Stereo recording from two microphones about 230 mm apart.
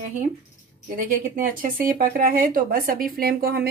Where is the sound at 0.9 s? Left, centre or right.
Right.